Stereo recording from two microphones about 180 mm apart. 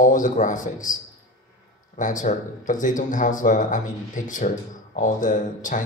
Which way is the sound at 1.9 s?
45° left (ahead or behind).